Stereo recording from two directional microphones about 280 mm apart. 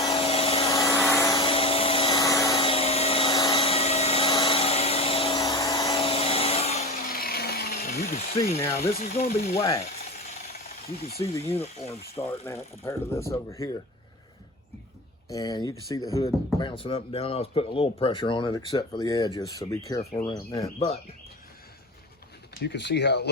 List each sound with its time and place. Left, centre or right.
0.0 s vacuum cleaner: centre
1.0 s vehicle: centre; by 8.4 s left
8.6 s speech: centre
8.9 s speech: left
9.6 s speech: centre
11.4 s speech: left
15.3 s speech: centre
22.6 s speech: left